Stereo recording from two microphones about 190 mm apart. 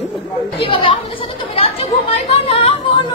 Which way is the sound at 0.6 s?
25° left (ahead or behind).